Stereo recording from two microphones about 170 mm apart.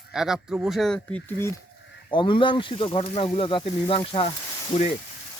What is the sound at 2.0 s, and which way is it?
Speech, 30° left (ahead or behind).